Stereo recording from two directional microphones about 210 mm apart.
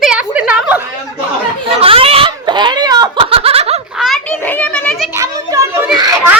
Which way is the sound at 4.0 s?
5° left (ahead or behind).